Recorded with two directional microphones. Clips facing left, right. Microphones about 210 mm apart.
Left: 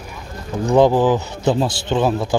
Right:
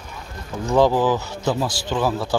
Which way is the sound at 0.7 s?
15° left (ahead or behind).